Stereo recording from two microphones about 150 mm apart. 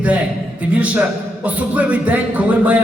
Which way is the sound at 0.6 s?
10° right (ahead or behind).